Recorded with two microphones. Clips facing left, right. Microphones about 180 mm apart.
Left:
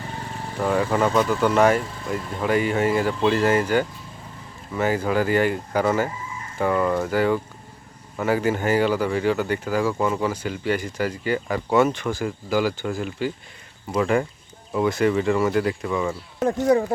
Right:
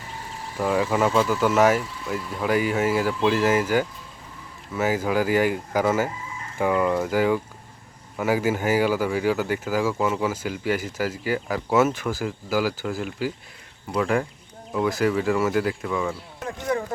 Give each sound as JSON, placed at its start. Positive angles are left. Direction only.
{"t": 0.6, "sound": "speech", "side_deg": -5}
{"t": 16.4, "sound": "speech", "side_deg": 45}